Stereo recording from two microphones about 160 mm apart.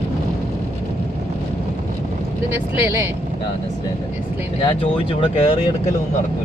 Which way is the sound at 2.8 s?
15° right (ahead or behind).